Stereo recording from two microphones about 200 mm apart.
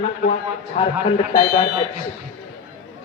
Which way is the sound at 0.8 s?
30° left (ahead or behind).